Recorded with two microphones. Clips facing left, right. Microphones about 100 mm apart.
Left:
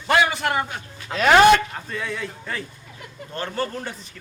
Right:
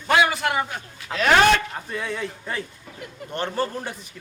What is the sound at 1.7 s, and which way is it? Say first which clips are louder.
A man's voice: even; 15° right (ahead or behind).